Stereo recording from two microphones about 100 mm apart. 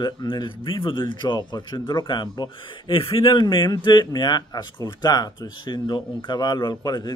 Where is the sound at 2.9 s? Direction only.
60° left (ahead or behind); by 7.1 s 45° left (ahead or behind).